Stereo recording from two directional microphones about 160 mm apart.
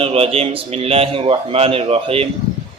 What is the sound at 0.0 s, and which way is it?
A man's voice, 35° right (ahead or behind).